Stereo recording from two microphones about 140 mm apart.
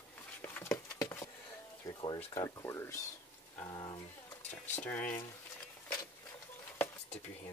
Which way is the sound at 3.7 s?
30° left (ahead or behind).